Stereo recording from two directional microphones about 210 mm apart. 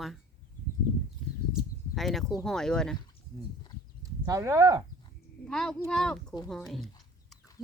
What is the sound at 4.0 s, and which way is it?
Speech, 15° right (ahead or behind).